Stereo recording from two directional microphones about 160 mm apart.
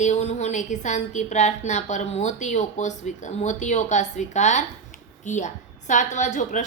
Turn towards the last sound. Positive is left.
turn(degrees=50)  # may be behind; listen again after turning